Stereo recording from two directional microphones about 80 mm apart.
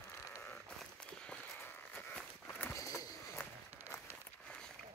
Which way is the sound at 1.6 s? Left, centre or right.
Left.